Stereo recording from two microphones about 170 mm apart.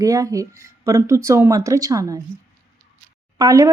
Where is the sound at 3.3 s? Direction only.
20° right (ahead or behind).